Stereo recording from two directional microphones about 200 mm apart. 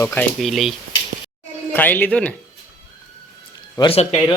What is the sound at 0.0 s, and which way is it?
Speech, 10° left (ahead or behind).